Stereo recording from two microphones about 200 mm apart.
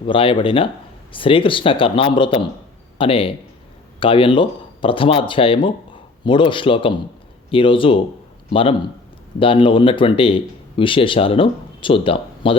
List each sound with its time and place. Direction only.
0.0 s speech: 25° left (ahead or behind)